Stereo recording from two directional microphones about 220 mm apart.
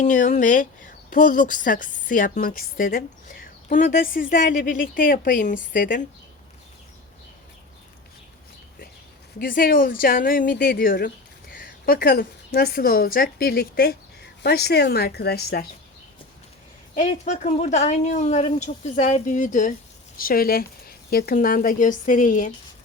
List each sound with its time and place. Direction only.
0.0 s speech: 35° left (ahead or behind)
9.4 s a woman's voice: 40° left (ahead or behind)
17.0 s speech: 30° left (ahead or behind)